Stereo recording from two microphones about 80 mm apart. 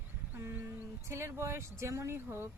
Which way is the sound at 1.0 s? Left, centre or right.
Right.